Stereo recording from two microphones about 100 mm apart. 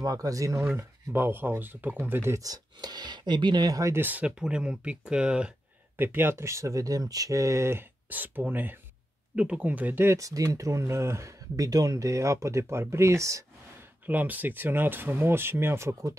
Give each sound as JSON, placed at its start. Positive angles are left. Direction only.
{"t": 0.0, "sound": "speech", "side_deg": -35}
{"t": 0.7, "sound": "speech", "side_deg": -20}
{"t": 2.4, "sound": "speech", "side_deg": -40}
{"t": 4.0, "sound": "speech", "side_deg": -15}
{"t": 5.9, "sound": "speech", "side_deg": -20}
{"t": 14.0, "sound": "speech", "side_deg": -15}